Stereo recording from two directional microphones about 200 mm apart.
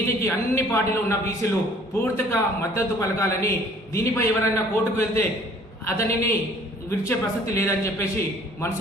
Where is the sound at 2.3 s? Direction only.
15° left (ahead or behind).